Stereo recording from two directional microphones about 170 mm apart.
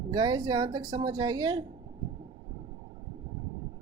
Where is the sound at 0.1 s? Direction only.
25° right (ahead or behind).